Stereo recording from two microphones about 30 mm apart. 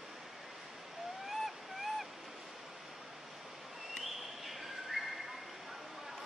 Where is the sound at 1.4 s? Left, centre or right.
Centre.